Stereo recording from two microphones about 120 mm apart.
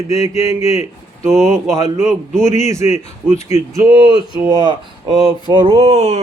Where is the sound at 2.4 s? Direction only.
75° left (ahead or behind).